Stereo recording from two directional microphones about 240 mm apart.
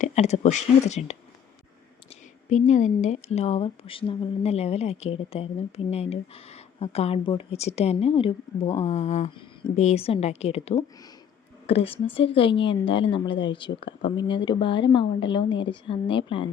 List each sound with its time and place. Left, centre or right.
0.0 s a woman's voice: left
2.5 s a woman's voice: left